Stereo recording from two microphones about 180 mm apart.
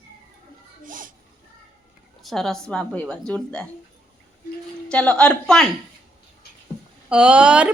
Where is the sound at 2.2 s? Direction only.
Centre (ahead or behind).